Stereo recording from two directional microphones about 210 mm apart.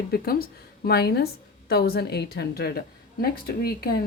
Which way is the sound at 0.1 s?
45° left (ahead or behind).